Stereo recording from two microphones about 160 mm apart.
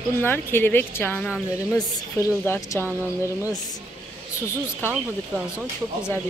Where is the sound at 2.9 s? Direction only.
10° right (ahead or behind).